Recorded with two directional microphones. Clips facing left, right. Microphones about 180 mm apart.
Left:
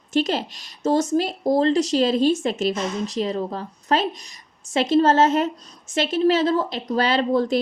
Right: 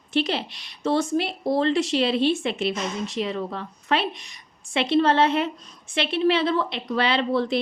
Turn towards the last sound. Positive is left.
turn(degrees=45)  # may be behind; listen again after turning